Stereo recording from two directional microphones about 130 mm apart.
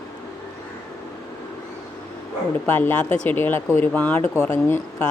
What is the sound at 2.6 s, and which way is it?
Speech, 15° left (ahead or behind).